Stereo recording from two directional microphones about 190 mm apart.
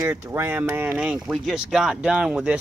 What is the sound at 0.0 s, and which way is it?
Speech, 15° right (ahead or behind).